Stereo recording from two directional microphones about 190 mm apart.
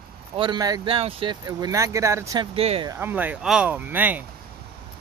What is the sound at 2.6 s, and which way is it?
Speech, 30° right (ahead or behind).